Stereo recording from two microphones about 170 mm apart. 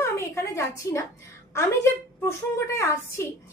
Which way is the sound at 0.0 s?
15° left (ahead or behind).